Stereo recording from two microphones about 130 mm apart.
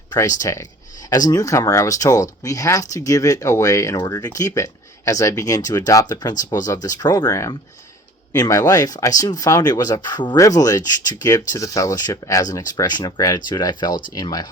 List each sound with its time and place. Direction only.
0.1 s speech: 25° left (ahead or behind)